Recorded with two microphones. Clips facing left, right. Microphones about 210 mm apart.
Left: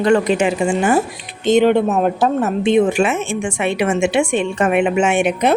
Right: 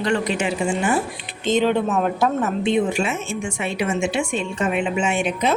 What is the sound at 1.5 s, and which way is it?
Speech, 70° left (ahead or behind).